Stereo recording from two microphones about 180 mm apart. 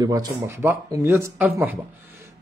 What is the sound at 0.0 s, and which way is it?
A man's voice, 20° right (ahead or behind).